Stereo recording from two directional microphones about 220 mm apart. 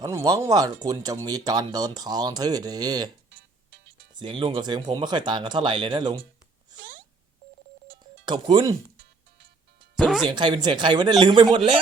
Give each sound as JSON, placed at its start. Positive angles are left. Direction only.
{"t": 0.0, "sound": "speech", "side_deg": -15}
{"t": 4.1, "sound": "speech", "side_deg": -20}
{"t": 8.2, "sound": "speech", "side_deg": -20}
{"t": 10.0, "sound": "speech", "side_deg": 0}
{"t": 10.2, "sound": "speech", "side_deg": -20}